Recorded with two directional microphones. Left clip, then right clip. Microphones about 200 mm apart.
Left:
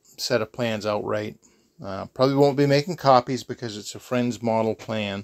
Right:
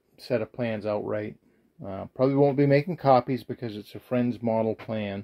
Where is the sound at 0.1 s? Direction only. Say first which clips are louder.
Left 4 dB; 15° left (ahead or behind).